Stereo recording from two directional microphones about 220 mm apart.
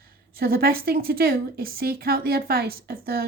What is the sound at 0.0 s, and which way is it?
A woman's voice, 45° right (ahead or behind).